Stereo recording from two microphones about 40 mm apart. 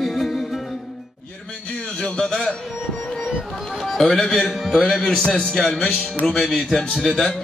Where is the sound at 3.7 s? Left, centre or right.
Centre.